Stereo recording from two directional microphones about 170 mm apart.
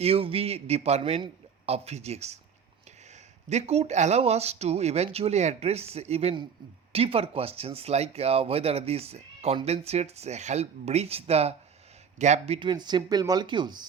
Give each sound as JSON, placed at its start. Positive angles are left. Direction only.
{"t": 0.0, "sound": "speech", "side_deg": -35}
{"t": 3.5, "sound": "speech", "side_deg": -40}
{"t": 12.5, "sound": "speech", "side_deg": -25}